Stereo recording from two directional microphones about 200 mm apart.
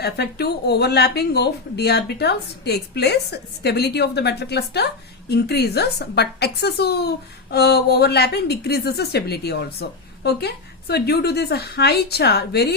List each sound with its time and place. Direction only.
0.0 s a woman's voice: 55° left (ahead or behind)